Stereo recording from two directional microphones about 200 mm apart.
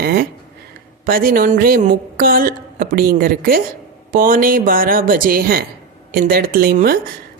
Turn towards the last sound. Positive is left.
turn(degrees=-45)  # may be behind; listen again after turning